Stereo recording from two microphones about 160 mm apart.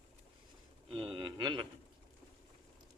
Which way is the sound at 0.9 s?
30° right (ahead or behind).